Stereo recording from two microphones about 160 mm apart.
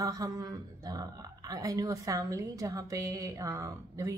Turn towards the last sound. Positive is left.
turn(degrees=-20)  # may be behind; listen again after turning